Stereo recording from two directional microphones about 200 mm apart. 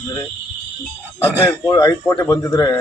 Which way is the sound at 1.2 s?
10° left (ahead or behind).